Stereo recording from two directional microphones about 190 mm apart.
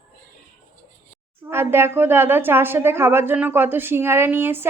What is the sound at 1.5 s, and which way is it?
A woman's voice, 10° right (ahead or behind).